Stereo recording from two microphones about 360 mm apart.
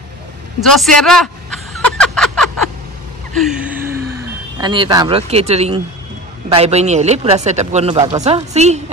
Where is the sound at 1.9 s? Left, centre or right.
Centre.